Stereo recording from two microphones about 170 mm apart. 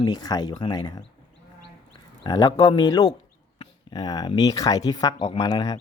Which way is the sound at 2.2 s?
25° left (ahead or behind).